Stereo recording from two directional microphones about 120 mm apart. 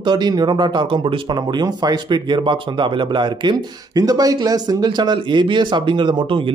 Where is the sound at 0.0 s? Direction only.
35° right (ahead or behind).